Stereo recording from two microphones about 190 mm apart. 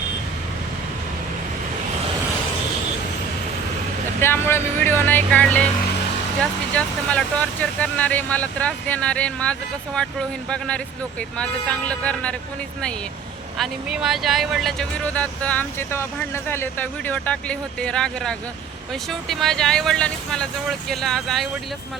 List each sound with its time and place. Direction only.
4.2 s speech: 10° left (ahead or behind)
13.6 s speech: 5° right (ahead or behind)